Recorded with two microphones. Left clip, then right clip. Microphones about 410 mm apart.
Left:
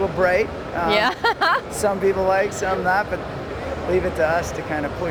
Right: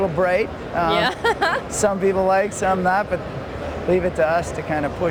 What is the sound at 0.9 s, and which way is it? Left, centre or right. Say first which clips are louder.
Speech: left 1 dB; left.